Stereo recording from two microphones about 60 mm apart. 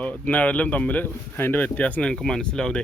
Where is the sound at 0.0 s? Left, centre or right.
Left.